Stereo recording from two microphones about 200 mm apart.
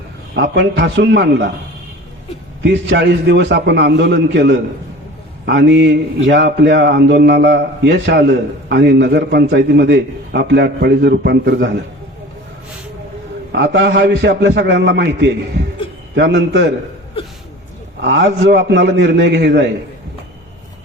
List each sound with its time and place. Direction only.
0.3 s a man's voice: 60° right (ahead or behind)
2.6 s a man's voice: 60° right (ahead or behind)
13.5 s a man's voice: 60° right (ahead or behind)
18.0 s a man's voice: 65° right (ahead or behind)